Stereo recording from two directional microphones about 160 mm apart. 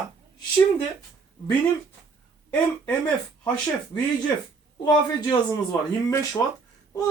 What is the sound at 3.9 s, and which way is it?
Speech, 30° left (ahead or behind).